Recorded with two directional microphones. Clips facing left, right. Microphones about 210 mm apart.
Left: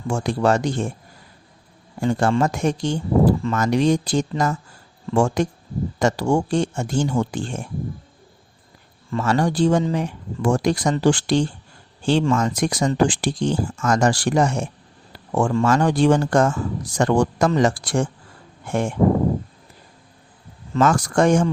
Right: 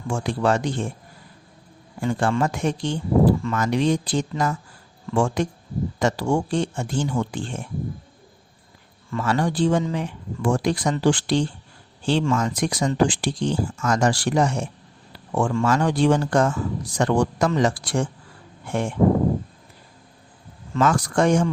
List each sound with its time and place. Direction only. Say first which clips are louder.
0.1 s speech: left 2 dB; 40° left (ahead or behind)
2.0 s speech: left 3 dB; 40° left (ahead or behind)
9.0 s speech: left 3 dB; 35° left (ahead or behind)
20.7 s speech: left 2 dB; 45° left (ahead or behind)